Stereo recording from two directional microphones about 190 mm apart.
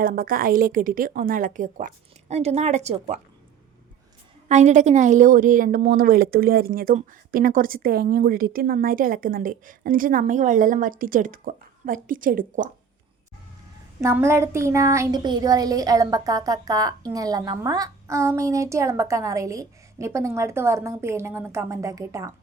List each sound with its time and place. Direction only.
0.0 s a woman's voice: 50° right (ahead or behind)
4.4 s a woman's voice: 35° right (ahead or behind)
14.0 s speech: 15° right (ahead or behind)